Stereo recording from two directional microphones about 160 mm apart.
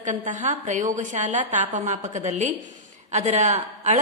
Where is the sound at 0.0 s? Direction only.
50° right (ahead or behind).